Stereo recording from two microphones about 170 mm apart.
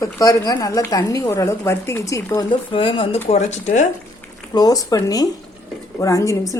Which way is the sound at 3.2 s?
40° left (ahead or behind).